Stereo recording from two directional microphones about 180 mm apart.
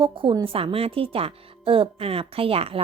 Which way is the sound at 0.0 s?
30° right (ahead or behind).